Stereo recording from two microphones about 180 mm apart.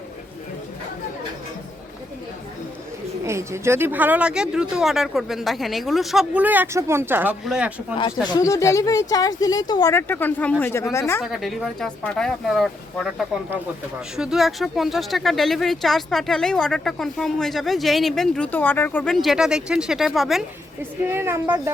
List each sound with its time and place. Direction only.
3.2 s speech: 15° right (ahead or behind)
7.9 s speech: 25° left (ahead or behind)
11.2 s speech: centre (ahead or behind)
21.1 s speech: 10° right (ahead or behind)